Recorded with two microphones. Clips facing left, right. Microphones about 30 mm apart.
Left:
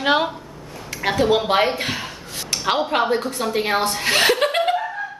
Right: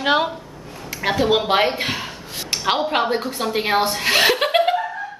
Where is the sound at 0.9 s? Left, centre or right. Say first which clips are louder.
Even; centre.